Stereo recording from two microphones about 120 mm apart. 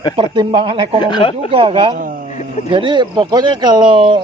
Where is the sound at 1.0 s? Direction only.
45° left (ahead or behind).